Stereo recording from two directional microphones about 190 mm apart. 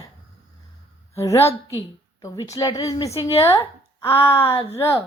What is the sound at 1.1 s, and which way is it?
A woman's voice, 15° left (ahead or behind).